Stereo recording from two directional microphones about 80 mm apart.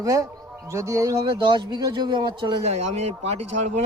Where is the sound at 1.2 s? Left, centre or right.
Right.